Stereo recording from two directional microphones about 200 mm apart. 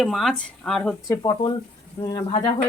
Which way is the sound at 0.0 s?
Centre (ahead or behind).